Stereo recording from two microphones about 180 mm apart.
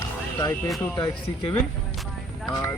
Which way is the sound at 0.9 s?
25° left (ahead or behind).